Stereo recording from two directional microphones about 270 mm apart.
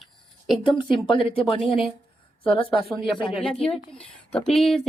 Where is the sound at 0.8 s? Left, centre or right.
Centre.